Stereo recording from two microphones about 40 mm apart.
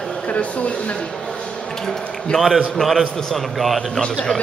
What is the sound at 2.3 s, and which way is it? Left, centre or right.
Speech, left.